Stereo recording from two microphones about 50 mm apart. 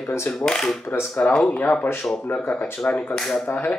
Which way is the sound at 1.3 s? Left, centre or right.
Centre.